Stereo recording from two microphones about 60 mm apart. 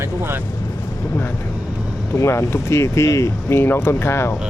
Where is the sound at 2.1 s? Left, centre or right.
Left.